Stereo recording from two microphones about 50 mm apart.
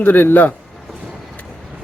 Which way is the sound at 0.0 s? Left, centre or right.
Left.